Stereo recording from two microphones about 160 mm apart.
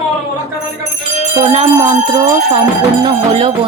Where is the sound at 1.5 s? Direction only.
30° right (ahead or behind).